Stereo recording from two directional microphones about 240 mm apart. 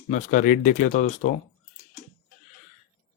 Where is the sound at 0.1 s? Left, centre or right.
Left.